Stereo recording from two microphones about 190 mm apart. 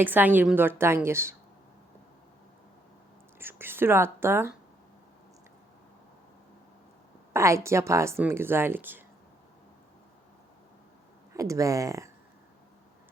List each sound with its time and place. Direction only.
0.0 s a woman's voice: 10° right (ahead or behind)
3.3 s whispering: 10° right (ahead or behind)
7.3 s a woman's voice: 15° right (ahead or behind)
11.3 s a woman's voice: 15° right (ahead or behind)